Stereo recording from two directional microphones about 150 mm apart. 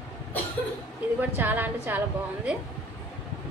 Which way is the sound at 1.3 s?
10° right (ahead or behind).